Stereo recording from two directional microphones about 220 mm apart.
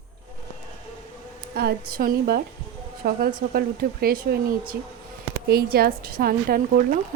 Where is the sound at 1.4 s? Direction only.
45° right (ahead or behind).